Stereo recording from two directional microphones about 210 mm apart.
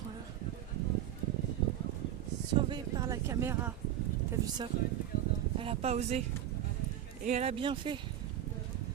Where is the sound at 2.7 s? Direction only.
20° right (ahead or behind).